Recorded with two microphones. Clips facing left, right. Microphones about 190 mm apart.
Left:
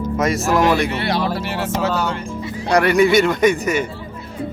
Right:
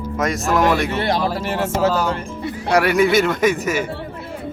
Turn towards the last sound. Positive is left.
turn(degrees=-5)  # may be behind; listen again after turning